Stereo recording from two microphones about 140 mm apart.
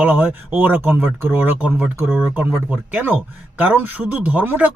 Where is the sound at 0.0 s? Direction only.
10° right (ahead or behind).